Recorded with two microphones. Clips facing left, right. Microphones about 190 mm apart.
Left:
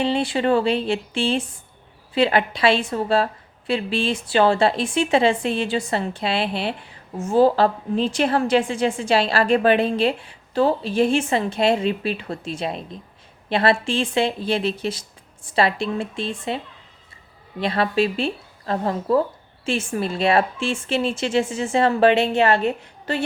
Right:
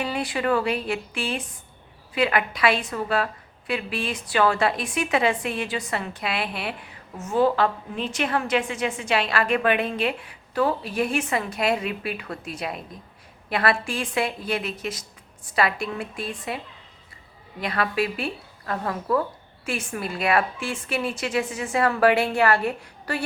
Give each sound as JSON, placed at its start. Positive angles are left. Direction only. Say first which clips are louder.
{"t": 0.0, "sound": "a woman's voice", "louder": "left 5 dB", "side_deg": 25}
{"t": 17.6, "sound": "a woman's voice", "louder": "left 5 dB", "side_deg": 25}